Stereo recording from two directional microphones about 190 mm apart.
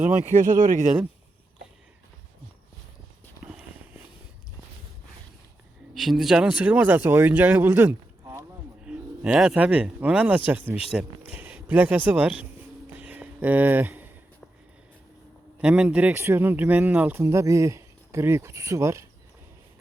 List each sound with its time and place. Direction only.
0.3 s speech: 45° right (ahead or behind)
3.4 s walk: 5° right (ahead or behind)
5.9 s speech: centre (ahead or behind)
12.9 s a sound: 10° right (ahead or behind)
15.6 s speech: 5° right (ahead or behind)